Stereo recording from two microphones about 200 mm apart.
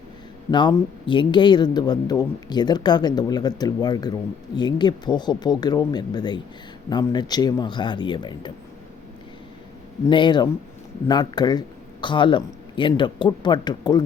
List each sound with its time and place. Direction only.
0.5 s speech: 25° left (ahead or behind)
10.1 s speech: 25° left (ahead or behind)